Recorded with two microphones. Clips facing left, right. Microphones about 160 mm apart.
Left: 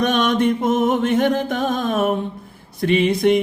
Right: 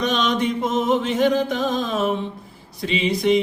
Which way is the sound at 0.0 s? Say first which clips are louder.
Left 4 dB; 55° left (ahead or behind).